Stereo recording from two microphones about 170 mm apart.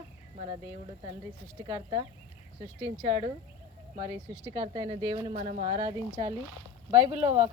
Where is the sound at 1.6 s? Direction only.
30° right (ahead or behind).